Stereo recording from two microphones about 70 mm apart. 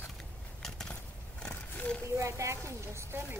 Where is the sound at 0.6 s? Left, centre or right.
Centre.